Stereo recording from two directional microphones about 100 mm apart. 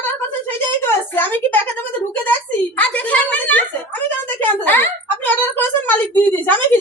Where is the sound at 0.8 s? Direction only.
20° left (ahead or behind).